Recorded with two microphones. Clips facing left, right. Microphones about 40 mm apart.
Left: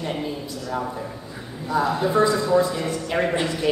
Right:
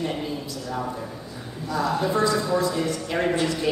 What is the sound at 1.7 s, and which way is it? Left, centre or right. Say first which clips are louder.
A man's voice: left 2 dB; left.